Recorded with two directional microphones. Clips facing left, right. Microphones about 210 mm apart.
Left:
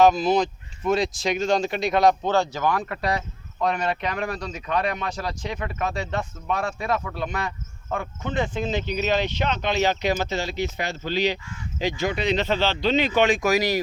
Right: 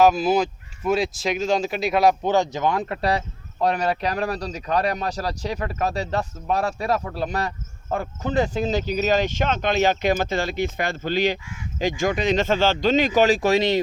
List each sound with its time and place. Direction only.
0.0 s speech: 5° right (ahead or behind); by 13.7 s 25° right (ahead or behind)